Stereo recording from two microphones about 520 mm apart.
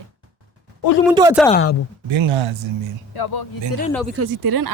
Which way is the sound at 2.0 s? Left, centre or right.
Right.